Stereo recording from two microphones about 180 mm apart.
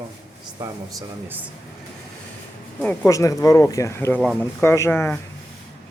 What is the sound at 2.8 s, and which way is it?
Speech, 15° left (ahead or behind).